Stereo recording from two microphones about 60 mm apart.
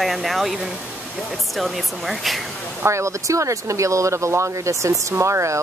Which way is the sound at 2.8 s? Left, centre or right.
Right.